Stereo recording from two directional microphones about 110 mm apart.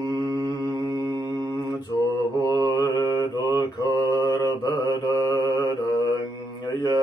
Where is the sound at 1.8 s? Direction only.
35° left (ahead or behind).